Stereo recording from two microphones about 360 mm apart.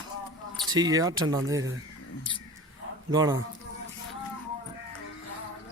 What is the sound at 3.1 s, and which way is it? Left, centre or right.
Speech, centre.